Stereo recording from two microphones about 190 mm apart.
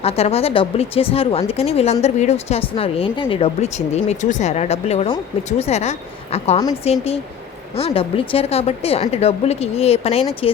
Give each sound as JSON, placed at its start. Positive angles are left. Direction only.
{"t": 0.0, "sound": "speech", "side_deg": 30}